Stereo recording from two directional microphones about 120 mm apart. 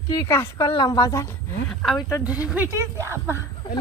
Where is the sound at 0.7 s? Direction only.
35° left (ahead or behind).